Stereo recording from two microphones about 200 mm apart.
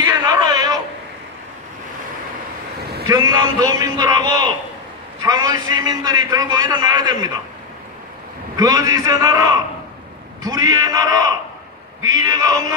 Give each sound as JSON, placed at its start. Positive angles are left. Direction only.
{"t": 0.1, "sound": "a sound", "side_deg": -20}
{"t": 3.1, "sound": "a man's voice", "side_deg": -15}
{"t": 8.5, "sound": "a man's voice", "side_deg": -20}